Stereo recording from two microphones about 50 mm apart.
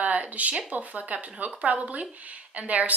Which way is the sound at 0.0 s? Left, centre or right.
Right.